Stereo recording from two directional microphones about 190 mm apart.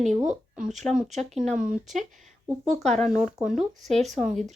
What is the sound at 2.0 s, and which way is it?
Speech, 40° right (ahead or behind).